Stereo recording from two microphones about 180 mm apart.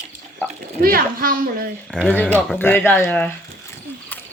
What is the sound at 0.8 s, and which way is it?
Speech, 55° right (ahead or behind).